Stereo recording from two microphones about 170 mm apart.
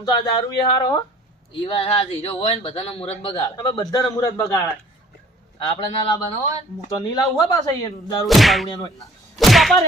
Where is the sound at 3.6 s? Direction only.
20° left (ahead or behind).